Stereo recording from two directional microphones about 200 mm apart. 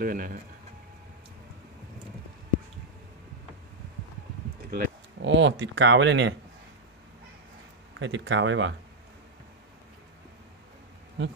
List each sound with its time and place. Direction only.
0.0 s speech: 45° right (ahead or behind)
4.6 s speech: 45° right (ahead or behind)
5.2 s speech: 65° right (ahead or behind)
8.0 s speech: 65° right (ahead or behind)
11.2 s speech: 65° right (ahead or behind)